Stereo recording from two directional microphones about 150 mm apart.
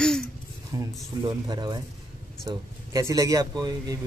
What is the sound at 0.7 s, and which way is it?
Speech, 30° right (ahead or behind).